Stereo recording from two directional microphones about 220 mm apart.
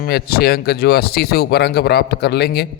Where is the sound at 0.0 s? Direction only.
45° left (ahead or behind).